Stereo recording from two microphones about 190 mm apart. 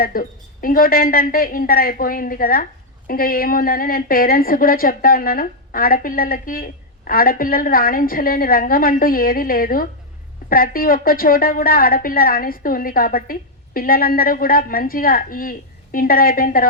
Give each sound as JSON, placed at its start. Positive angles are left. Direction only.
{"t": 0.0, "sound": "a woman's voice", "side_deg": 50}